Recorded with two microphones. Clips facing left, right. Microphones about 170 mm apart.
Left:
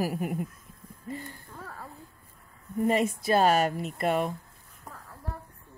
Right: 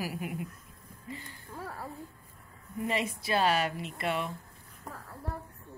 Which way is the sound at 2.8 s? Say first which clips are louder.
Left 7 dB; 45° left (ahead or behind).